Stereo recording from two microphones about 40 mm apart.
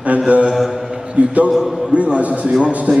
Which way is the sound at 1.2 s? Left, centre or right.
Right.